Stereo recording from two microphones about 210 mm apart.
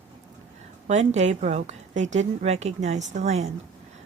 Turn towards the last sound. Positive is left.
turn(degrees=-35)  # may be behind; listen again after turning